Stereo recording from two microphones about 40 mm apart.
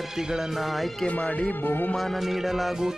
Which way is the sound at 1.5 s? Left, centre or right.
Left.